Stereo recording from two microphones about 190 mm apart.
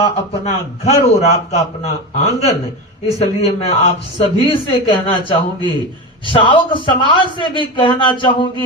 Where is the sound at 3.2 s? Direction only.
35° left (ahead or behind).